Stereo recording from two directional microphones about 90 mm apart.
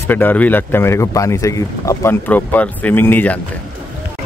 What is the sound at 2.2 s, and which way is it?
Speech, 20° left (ahead or behind).